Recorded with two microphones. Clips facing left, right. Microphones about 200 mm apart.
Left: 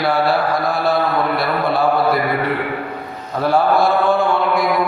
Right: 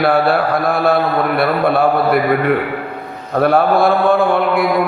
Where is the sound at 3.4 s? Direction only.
55° right (ahead or behind).